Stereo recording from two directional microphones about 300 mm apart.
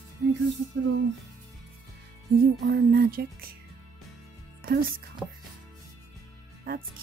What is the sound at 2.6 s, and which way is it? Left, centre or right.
Speech, right.